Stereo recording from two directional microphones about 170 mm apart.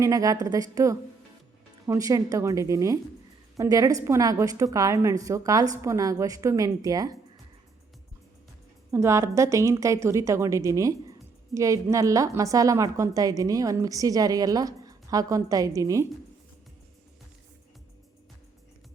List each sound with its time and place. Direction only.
0.0 s a woman's voice: 20° right (ahead or behind)
8.9 s a woman's voice: 15° right (ahead or behind)